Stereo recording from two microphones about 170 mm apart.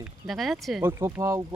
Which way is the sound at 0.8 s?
20° right (ahead or behind).